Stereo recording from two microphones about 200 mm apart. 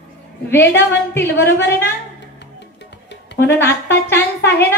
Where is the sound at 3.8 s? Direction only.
10° left (ahead or behind).